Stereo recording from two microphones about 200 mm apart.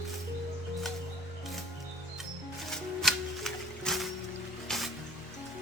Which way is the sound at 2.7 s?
Centre (ahead or behind).